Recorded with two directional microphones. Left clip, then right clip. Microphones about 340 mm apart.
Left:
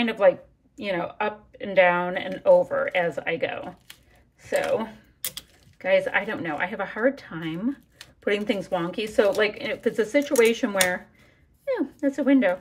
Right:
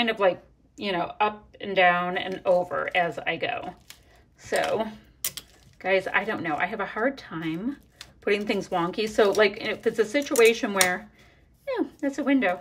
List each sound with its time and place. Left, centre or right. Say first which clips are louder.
0.8 s speech: right 1 dB; centre